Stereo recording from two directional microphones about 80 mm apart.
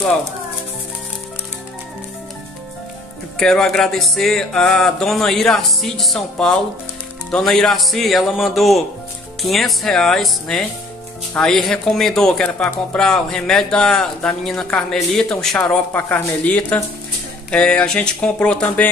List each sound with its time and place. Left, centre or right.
3.3 s speech: centre
15.9 s a man's voice: left
17.5 s speech: centre